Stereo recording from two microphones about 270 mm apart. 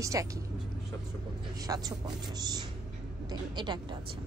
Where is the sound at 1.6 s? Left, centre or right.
Centre.